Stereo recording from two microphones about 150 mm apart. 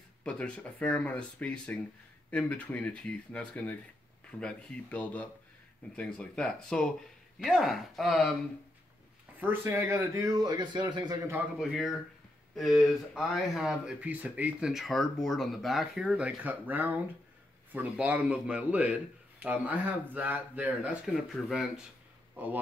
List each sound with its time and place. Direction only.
0.2 s speech: 10° left (ahead or behind)
9.4 s speech: 15° right (ahead or behind)
11.6 s speech: centre (ahead or behind)
22.3 s speech: 10° right (ahead or behind)